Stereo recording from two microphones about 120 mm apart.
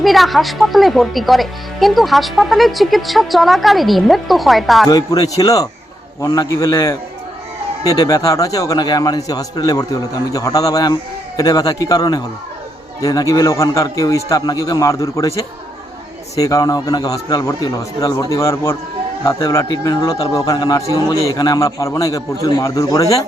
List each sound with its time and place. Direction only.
0.0 s speech: centre (ahead or behind)
4.9 s a man's voice: 30° left (ahead or behind)
16.3 s a man's voice: 30° left (ahead or behind)